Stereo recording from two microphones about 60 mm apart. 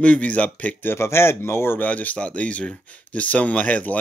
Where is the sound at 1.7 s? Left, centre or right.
Left.